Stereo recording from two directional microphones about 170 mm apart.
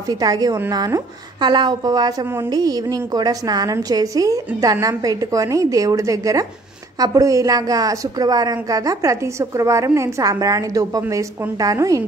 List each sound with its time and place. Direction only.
0.1 s speech: 20° right (ahead or behind)